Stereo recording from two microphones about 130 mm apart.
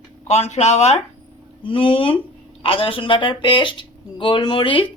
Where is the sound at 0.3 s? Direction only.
55° left (ahead or behind).